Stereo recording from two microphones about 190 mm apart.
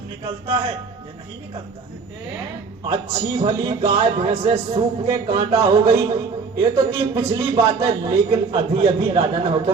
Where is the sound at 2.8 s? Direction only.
30° right (ahead or behind).